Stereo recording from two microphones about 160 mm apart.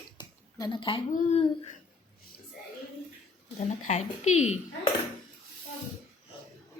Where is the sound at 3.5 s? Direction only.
45° left (ahead or behind).